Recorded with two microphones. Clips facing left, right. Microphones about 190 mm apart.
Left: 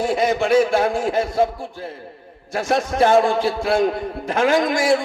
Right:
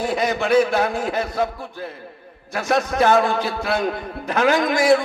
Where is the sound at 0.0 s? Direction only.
25° left (ahead or behind).